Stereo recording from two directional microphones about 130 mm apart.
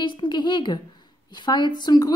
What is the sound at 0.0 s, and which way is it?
A woman's voice, 35° left (ahead or behind).